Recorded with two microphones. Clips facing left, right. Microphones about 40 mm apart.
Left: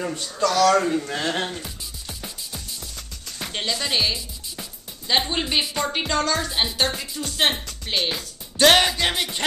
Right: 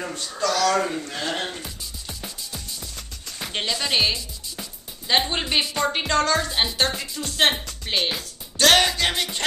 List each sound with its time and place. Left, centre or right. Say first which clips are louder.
0.0 s speech: left 3 dB; centre
1.0 s music: left 3 dB; centre
1.4 s music: left 1 dB; centre
3.5 s speech: right 1 dB; centre
8.5 s music: left 1 dB; centre